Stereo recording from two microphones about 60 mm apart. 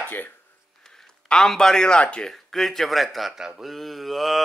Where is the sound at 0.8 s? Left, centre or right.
Centre.